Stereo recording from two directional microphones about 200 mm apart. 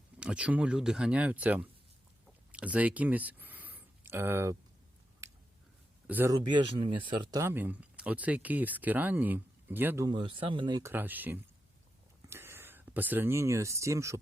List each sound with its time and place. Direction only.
0.2 s speech: 5° right (ahead or behind)
2.5 s a sound: 5° right (ahead or behind)
6.1 s speech: 10° right (ahead or behind)
10.1 s speech: 25° right (ahead or behind)